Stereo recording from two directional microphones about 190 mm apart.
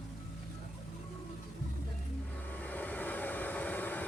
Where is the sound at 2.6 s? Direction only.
10° left (ahead or behind).